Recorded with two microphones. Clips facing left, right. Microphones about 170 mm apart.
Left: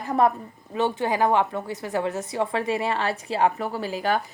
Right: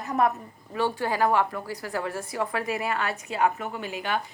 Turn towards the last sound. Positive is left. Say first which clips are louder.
# left 5 dB
turn(degrees=35)  # may be behind; listen again after turning